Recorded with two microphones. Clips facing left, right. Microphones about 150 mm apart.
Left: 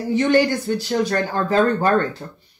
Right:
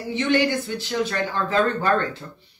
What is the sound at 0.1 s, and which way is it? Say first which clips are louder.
Speech: left 4 dB; 40° left (ahead or behind).